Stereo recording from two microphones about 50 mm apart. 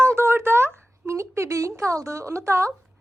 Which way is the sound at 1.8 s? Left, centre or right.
Right.